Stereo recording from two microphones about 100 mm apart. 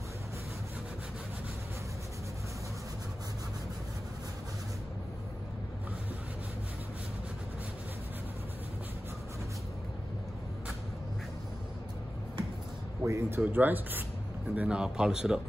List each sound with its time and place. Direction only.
13.0 s speech: 30° right (ahead or behind)
13.5 s speech: 20° right (ahead or behind)